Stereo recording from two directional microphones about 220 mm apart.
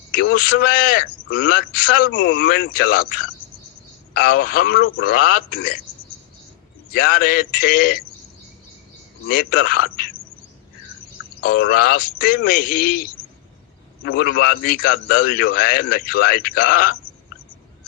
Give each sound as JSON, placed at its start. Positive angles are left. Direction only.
{"t": 0.1, "sound": "a man's voice", "side_deg": 40}
{"t": 4.1, "sound": "a man's voice", "side_deg": 45}
{"t": 6.9, "sound": "a man's voice", "side_deg": 45}
{"t": 9.2, "sound": "a man's voice", "side_deg": 40}
{"t": 11.3, "sound": "a man's voice", "side_deg": 40}
{"t": 14.2, "sound": "a man's voice", "side_deg": 45}